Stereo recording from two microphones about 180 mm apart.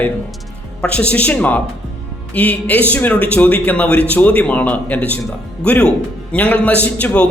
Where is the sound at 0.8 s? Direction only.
5° left (ahead or behind).